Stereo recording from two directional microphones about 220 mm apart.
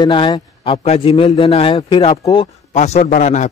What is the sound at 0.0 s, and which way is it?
A man's voice, 20° left (ahead or behind).